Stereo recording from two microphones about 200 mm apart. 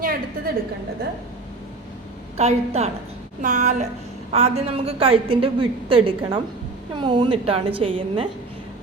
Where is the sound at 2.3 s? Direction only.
30° right (ahead or behind).